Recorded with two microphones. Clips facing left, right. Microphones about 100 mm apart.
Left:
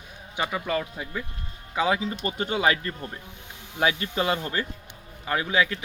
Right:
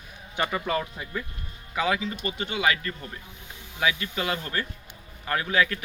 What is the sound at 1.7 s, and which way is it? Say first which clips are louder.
A man's voice: left 2 dB; 25° left (ahead or behind).